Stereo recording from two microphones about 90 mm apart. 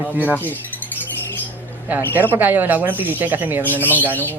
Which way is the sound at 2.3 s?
20° right (ahead or behind).